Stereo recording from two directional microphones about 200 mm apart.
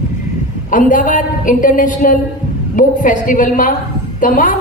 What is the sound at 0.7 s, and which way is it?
A woman's voice, 40° left (ahead or behind).